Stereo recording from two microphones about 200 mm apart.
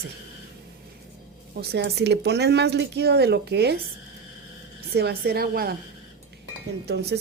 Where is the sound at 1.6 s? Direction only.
55° right (ahead or behind).